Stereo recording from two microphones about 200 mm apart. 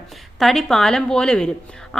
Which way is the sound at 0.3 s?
Centre (ahead or behind).